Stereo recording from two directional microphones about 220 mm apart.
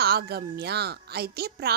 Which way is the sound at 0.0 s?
45° right (ahead or behind).